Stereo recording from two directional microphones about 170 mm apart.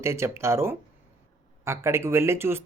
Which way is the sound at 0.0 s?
15° right (ahead or behind).